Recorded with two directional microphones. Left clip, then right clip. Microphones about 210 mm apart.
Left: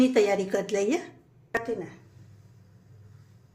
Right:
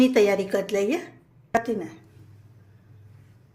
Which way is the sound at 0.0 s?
15° right (ahead or behind).